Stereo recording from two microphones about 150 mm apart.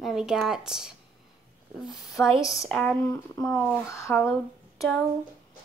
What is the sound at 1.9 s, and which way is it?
Speech, 25° left (ahead or behind).